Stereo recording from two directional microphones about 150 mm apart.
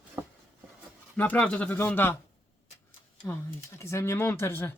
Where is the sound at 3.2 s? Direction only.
20° left (ahead or behind).